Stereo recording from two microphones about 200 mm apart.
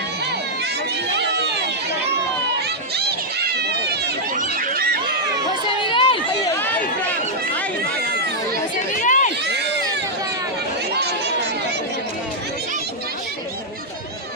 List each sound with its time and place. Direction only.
1.1 s run: 55° right (ahead or behind)
2.9 s run: 55° right (ahead or behind)
4.6 s a sound: 50° right (ahead or behind)
5.5 s crowd: 25° left (ahead or behind)
6.5 s run: 10° left (ahead or behind)
8.7 s chatter: 40° left (ahead or behind)
9.4 s crowd: 60° right (ahead or behind)